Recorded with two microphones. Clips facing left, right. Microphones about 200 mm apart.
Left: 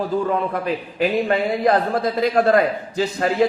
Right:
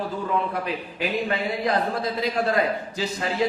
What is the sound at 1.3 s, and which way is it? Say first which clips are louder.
A man's voice: left 7 dB; 50° left (ahead or behind).